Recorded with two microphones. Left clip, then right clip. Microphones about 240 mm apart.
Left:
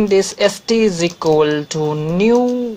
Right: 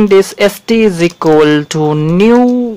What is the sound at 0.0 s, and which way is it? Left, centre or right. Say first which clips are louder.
Speech: right 6 dB; right.